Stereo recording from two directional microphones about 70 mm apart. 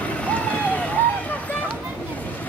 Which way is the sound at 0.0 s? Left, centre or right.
Left.